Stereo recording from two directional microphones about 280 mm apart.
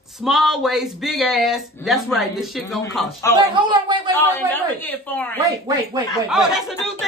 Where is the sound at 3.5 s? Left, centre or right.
Centre.